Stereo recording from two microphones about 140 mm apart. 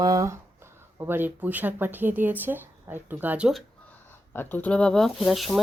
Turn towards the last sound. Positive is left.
turn(degrees=0)  # may be behind; listen again after turning